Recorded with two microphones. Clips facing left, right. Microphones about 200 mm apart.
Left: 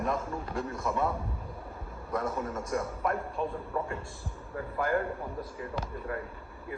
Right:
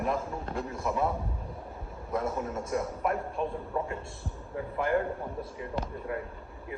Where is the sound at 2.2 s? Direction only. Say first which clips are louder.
Right 1 dB; centre (ahead or behind).